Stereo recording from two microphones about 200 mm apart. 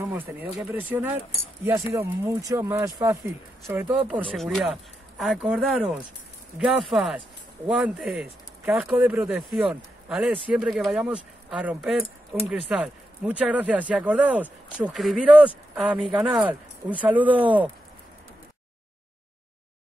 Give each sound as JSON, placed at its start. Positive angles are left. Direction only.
{"t": 0.0, "sound": "speech", "side_deg": -10}